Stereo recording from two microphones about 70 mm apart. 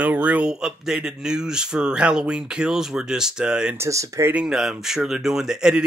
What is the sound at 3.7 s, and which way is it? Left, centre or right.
Speech, right.